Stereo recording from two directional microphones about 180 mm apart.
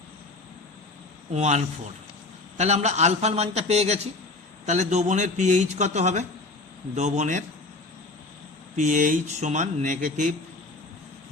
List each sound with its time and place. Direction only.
1.3 s a man's voice: 40° right (ahead or behind)
8.7 s speech: 45° right (ahead or behind)